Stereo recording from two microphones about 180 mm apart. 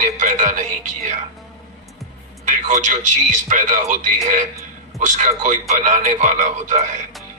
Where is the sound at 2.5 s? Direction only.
45° right (ahead or behind).